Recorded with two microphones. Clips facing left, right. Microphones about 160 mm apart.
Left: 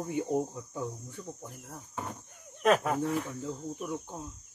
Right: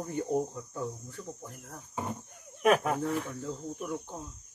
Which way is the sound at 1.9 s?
15° right (ahead or behind).